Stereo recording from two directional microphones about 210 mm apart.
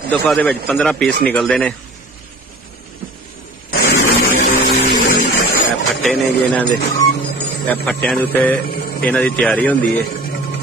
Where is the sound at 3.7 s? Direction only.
50° left (ahead or behind).